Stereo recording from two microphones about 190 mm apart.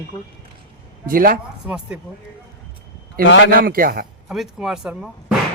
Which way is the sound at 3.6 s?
50° right (ahead or behind).